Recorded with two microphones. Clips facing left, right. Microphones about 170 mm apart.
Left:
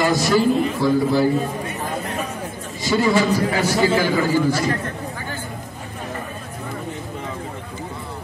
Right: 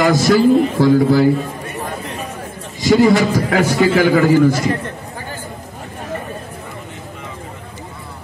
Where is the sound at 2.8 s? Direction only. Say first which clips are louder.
Right 6 dB; 90° right.